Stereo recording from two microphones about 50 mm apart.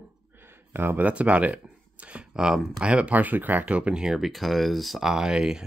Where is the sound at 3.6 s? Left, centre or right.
Right.